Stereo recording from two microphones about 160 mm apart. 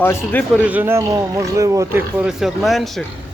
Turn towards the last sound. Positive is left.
turn(degrees=0)  # may be behind; listen again after turning